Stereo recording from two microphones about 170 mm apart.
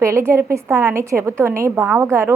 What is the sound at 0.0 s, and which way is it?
A woman's voice, 15° right (ahead or behind).